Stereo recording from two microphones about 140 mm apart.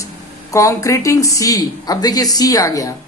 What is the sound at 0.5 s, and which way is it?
Speech, 25° left (ahead or behind).